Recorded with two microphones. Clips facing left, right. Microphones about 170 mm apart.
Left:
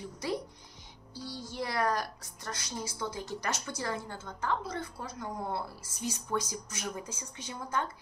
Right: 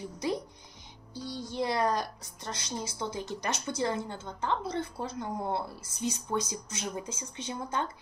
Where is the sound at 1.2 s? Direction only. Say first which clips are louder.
Right 3 dB; 5° left (ahead or behind).